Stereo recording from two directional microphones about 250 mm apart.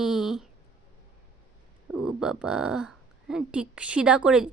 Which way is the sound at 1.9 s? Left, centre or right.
Centre.